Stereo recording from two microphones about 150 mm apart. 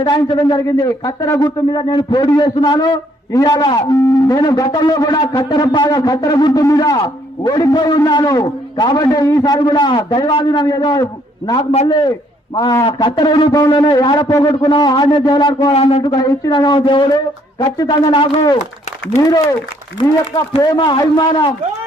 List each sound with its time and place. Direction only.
0.0 s speech: 30° left (ahead or behind)
12.5 s speech: 25° left (ahead or behind)
16.0 s speech: 30° left (ahead or behind)
20.6 s speech: 30° left (ahead or behind)